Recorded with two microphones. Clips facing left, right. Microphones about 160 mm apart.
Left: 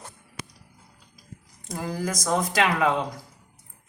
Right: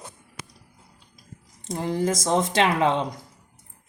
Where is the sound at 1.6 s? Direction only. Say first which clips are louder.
Right 5 dB; 25° right (ahead or behind).